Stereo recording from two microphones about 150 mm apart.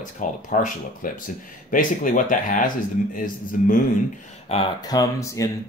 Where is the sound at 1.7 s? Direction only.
65° left (ahead or behind).